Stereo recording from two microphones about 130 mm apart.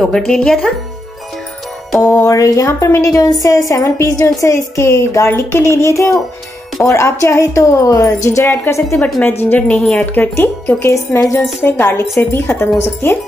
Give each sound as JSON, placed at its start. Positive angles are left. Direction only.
{"t": 0.0, "sound": "speech", "side_deg": 0}
{"t": 2.0, "sound": "a woman's voice", "side_deg": 20}
{"t": 9.4, "sound": "a woman's voice", "side_deg": 10}